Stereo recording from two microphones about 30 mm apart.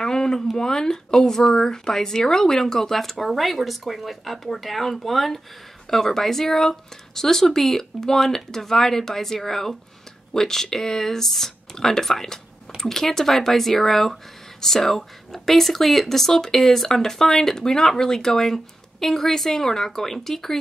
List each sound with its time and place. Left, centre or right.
0.0 s a sound: centre
0.6 s speech: left; by 5.4 s centre
5.9 s speech: centre